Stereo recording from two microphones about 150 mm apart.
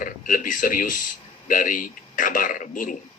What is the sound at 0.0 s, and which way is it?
A man's voice, 65° left (ahead or behind).